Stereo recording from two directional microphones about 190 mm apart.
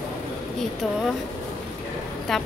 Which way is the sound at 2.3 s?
Centre (ahead or behind).